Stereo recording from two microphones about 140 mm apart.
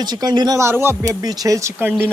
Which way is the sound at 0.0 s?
30° right (ahead or behind).